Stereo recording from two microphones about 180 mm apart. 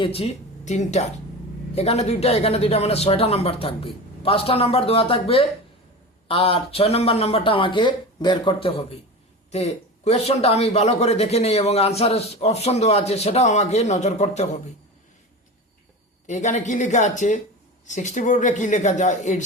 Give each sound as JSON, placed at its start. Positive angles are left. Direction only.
{"t": 0.0, "sound": "a man's voice", "side_deg": 35}
{"t": 16.2, "sound": "a man's voice", "side_deg": 40}